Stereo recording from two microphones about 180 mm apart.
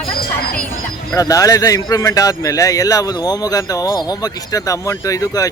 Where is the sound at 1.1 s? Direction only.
20° left (ahead or behind).